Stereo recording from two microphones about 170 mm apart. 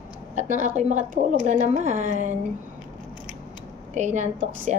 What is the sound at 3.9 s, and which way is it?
Speech, 45° right (ahead or behind).